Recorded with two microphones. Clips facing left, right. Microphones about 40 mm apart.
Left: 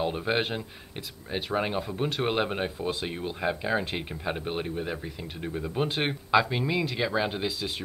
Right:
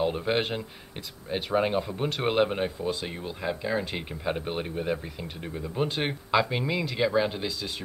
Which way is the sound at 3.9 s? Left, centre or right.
Centre.